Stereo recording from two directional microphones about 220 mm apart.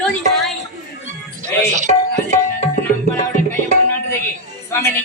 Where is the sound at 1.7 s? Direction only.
35° right (ahead or behind).